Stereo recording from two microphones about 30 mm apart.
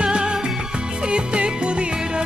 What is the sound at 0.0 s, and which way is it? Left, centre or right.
Music, right.